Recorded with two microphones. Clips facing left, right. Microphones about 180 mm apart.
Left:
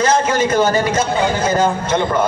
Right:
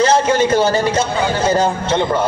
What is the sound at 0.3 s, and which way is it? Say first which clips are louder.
Speech: right 1 dB; 30° right (ahead or behind).